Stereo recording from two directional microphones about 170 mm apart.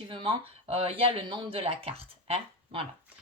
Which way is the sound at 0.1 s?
30° right (ahead or behind).